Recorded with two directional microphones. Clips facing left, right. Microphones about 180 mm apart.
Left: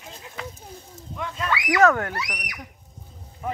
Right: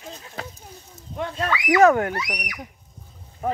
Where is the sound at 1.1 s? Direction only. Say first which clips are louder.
Right 4 dB; 35° right (ahead or behind).